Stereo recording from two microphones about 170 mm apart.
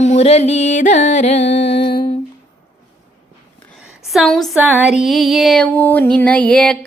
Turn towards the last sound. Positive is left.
turn(degrees=5)  # may be behind; listen again after turning